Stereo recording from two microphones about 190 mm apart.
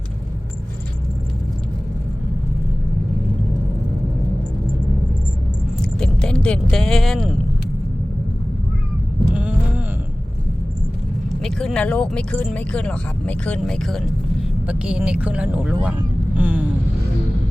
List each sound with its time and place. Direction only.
5.8 s vehicle: 5° left (ahead or behind)
9.3 s a sound: 5° right (ahead or behind)
11.3 s speech: 5° left (ahead or behind)